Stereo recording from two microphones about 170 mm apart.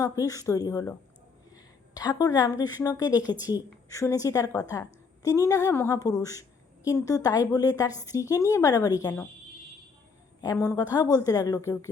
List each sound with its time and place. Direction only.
0.0 s a woman's voice: 20° left (ahead or behind)
10.4 s a woman's voice: 20° left (ahead or behind)